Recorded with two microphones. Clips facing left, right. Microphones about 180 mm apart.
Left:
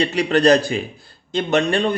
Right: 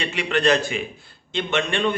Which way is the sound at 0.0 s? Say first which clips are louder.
Left 6 dB; 40° left (ahead or behind).